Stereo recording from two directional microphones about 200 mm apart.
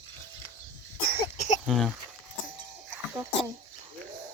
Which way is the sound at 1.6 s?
Centre (ahead or behind).